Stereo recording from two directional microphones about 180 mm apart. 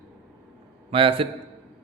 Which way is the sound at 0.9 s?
30° right (ahead or behind).